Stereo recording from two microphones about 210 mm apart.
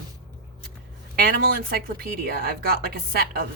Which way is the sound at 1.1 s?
45° right (ahead or behind).